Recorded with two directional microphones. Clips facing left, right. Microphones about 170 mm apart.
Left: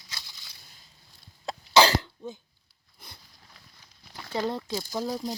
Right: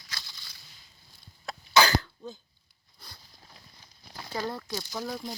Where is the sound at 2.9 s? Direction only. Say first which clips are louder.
Left 1 dB; 20° left (ahead or behind).